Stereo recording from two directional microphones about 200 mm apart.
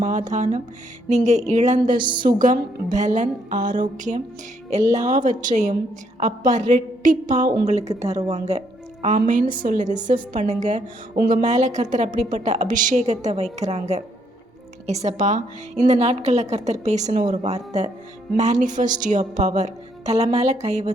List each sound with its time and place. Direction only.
0.0 s a woman's voice: 35° right (ahead or behind)
2.0 s a woman's voice: 25° right (ahead or behind)
2.2 s a woman's voice: 40° right (ahead or behind)